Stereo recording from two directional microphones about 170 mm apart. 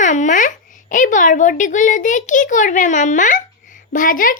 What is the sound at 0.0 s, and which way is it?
A child's voice, 45° left (ahead or behind).